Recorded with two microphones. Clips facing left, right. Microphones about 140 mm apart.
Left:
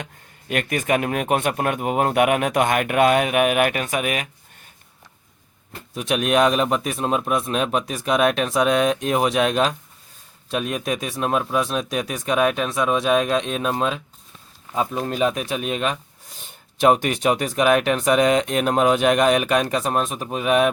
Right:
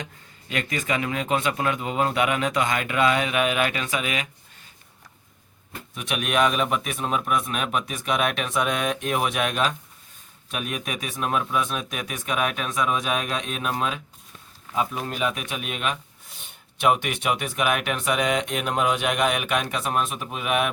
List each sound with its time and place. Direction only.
0.0 s a man's voice: 55° left (ahead or behind)
5.9 s speech: 40° left (ahead or behind)